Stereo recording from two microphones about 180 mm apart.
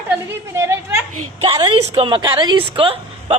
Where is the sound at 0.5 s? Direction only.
15° right (ahead or behind).